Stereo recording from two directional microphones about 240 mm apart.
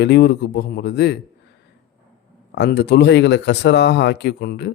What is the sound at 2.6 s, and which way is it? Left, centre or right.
Speech, left.